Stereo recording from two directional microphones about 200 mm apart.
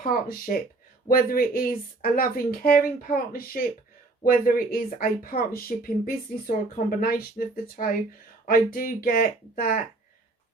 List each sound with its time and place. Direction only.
0.0 s speech: 45° left (ahead or behind)